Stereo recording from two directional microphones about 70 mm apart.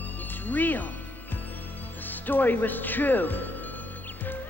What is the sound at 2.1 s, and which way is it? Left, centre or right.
Speech, left.